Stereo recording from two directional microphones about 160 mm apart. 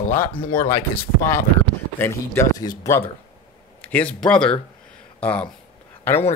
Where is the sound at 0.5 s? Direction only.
15° left (ahead or behind).